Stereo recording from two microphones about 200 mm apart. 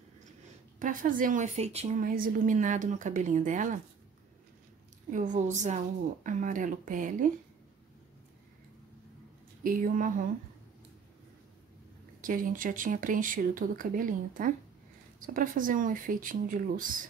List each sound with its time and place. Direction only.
0.7 s a woman's voice: 40° right (ahead or behind)
5.1 s a woman's voice: 40° right (ahead or behind)
9.6 s speech: 45° right (ahead or behind)
12.2 s a woman's voice: 40° right (ahead or behind)